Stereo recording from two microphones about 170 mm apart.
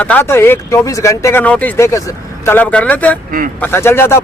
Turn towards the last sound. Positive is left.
turn(degrees=15)  # may be behind; listen again after turning